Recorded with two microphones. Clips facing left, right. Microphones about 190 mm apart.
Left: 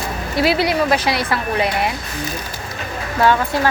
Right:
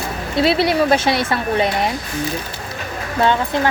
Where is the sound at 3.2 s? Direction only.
20° right (ahead or behind).